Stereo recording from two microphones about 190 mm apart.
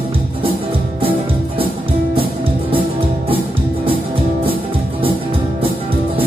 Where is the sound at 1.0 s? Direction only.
30° right (ahead or behind).